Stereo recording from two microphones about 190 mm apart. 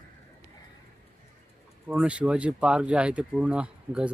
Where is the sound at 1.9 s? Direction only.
5° right (ahead or behind).